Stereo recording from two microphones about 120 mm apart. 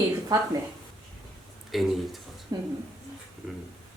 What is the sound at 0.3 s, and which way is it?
Speech, 35° right (ahead or behind).